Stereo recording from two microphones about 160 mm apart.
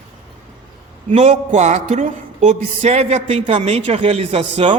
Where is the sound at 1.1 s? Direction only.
45° right (ahead or behind).